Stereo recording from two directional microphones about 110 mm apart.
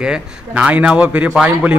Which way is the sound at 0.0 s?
10° right (ahead or behind).